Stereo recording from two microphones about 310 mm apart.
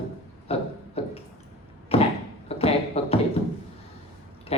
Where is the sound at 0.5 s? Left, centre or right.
Centre.